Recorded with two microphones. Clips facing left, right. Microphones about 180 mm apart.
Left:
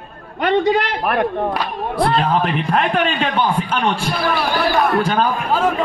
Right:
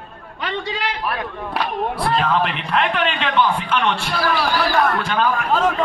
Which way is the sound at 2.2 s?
45° left (ahead or behind).